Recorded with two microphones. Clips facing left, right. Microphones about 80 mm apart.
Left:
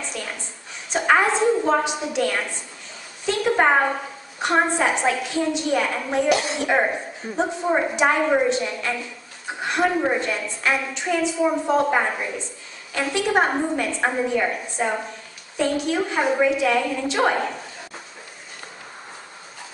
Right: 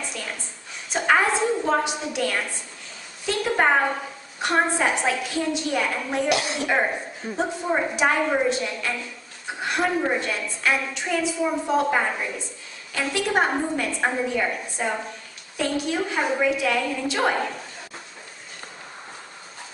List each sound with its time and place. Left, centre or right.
0.9 s a sound: centre
1.4 s a woman's voice: centre
16.2 s a woman's voice: centre
16.4 s a woman's voice: centre